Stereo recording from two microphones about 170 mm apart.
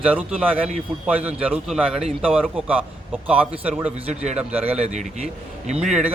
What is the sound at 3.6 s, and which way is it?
Speech, 10° right (ahead or behind).